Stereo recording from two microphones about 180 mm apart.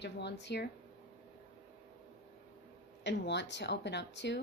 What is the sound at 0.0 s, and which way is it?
Speech, 70° left (ahead or behind).